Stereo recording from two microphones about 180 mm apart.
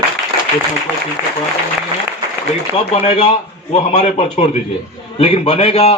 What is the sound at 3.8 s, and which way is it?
A man's voice, 35° left (ahead or behind).